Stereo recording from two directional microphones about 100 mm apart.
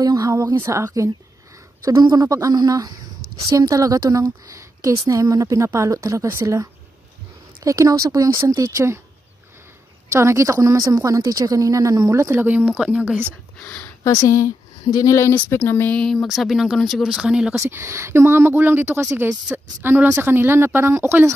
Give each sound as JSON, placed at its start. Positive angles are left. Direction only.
{"t": 0.0, "sound": "a sound", "side_deg": -40}
{"t": 0.6, "sound": "speech", "side_deg": -30}
{"t": 2.0, "sound": "a woman's voice", "side_deg": -40}
{"t": 10.0, "sound": "a woman's voice", "side_deg": -30}
{"t": 12.2, "sound": "speech", "side_deg": -25}
{"t": 13.6, "sound": "speech", "side_deg": 15}
{"t": 14.0, "sound": "a woman's voice", "side_deg": 30}
{"t": 15.5, "sound": "speech", "side_deg": 20}
{"t": 16.0, "sound": "speech", "side_deg": 0}
{"t": 17.6, "sound": "speech", "side_deg": -25}